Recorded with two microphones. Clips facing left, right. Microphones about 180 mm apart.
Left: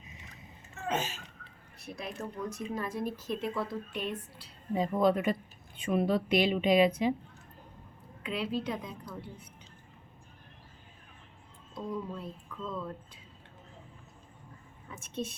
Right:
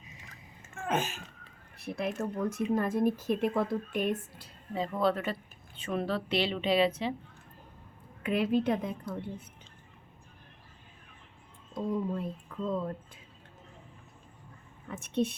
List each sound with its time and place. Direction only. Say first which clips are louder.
0.7 s a sound: right 2 dB; 50° right (ahead or behind)
1.8 s speech: right 6 dB; 60° right (ahead or behind)
4.7 s a woman's voice: left 2 dB; 15° left (ahead or behind)
8.2 s speech: right 6 dB; 55° right (ahead or behind)
11.7 s speech: right 5 dB; 50° right (ahead or behind)
14.8 s a woman's voice: right 7 dB; 60° right (ahead or behind)